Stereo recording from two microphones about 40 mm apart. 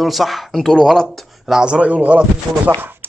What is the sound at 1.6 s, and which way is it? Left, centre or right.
Speech, right.